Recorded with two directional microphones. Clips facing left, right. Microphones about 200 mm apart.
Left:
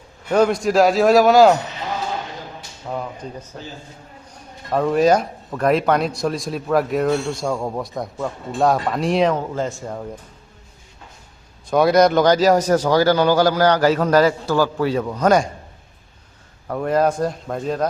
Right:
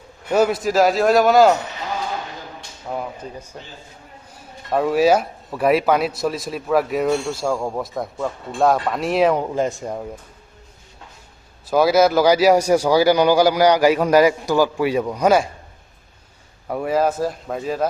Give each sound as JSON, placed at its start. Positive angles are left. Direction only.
{"t": 0.3, "sound": "speech", "side_deg": -5}
{"t": 2.9, "sound": "speech", "side_deg": -5}
{"t": 4.7, "sound": "speech", "side_deg": -5}
{"t": 9.6, "sound": "a man's voice", "side_deg": -15}
{"t": 11.6, "sound": "a man's voice", "side_deg": -5}
{"t": 16.6, "sound": "speech", "side_deg": -10}